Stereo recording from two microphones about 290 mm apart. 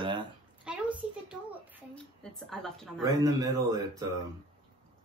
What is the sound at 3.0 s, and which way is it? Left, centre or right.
Speech, centre.